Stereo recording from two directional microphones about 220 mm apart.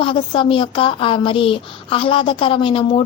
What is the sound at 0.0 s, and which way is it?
A woman's voice, 25° left (ahead or behind).